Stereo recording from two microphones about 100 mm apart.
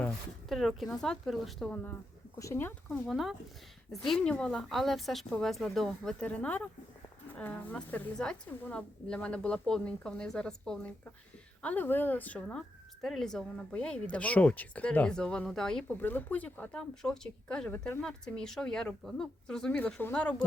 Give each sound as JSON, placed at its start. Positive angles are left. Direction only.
{"t": 0.4, "sound": "speech", "side_deg": 0}
{"t": 2.4, "sound": "speech", "side_deg": 25}
{"t": 3.1, "sound": "a woman's voice", "side_deg": -5}
{"t": 16.0, "sound": "a woman's voice", "side_deg": 20}
{"t": 20.0, "sound": "speech", "side_deg": 20}